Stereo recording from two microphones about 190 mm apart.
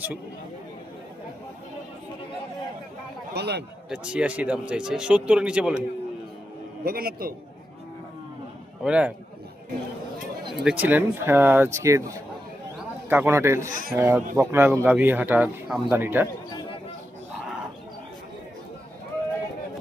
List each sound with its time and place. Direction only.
3.3 s a man's voice: 60° right (ahead or behind)
3.8 s speech: 5° right (ahead or behind)
6.8 s a man's voice: 50° right (ahead or behind)
8.8 s speech: 5° right (ahead or behind)
10.5 s speech: 5° right (ahead or behind)
13.1 s speech: 10° right (ahead or behind)
13.7 s a man's voice: 45° right (ahead or behind)
13.9 s speech: 15° right (ahead or behind)